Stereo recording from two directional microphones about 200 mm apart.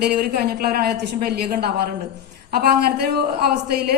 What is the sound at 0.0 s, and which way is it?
A woman's voice, 50° right (ahead or behind).